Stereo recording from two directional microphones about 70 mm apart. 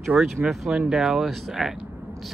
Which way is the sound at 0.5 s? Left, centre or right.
Centre.